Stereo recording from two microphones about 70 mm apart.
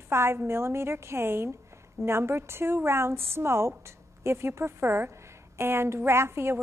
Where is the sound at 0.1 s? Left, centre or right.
Right.